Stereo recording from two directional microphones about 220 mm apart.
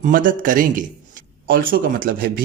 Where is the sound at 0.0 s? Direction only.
40° right (ahead or behind).